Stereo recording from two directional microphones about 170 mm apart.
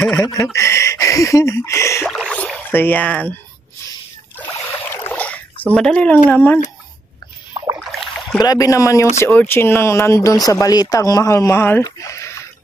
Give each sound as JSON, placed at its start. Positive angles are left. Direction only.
{"t": 0.1, "sound": "speech", "side_deg": 20}
{"t": 2.0, "sound": "speech", "side_deg": 5}
{"t": 4.4, "sound": "rowboat", "side_deg": 15}
{"t": 5.8, "sound": "speech", "side_deg": 5}
{"t": 7.8, "sound": "a sound", "side_deg": 0}
{"t": 8.4, "sound": "speech", "side_deg": 20}